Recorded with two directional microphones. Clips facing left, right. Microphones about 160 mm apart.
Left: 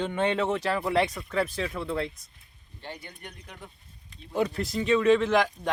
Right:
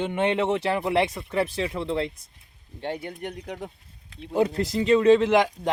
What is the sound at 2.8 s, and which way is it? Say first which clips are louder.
Speech: right 10 dB; 65° right (ahead or behind).